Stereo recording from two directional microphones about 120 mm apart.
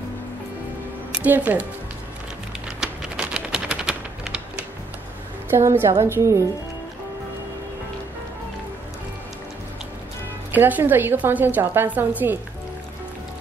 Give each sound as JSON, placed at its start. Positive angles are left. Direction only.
{"t": 1.2, "sound": "a woman's voice", "side_deg": -15}
{"t": 2.8, "sound": "typewriter", "side_deg": -5}
{"t": 5.5, "sound": "a woman's voice", "side_deg": -20}
{"t": 10.5, "sound": "a woman's voice", "side_deg": -15}